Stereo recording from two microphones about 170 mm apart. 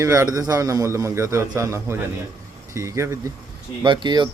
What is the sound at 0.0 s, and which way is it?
A man's voice, 15° right (ahead or behind).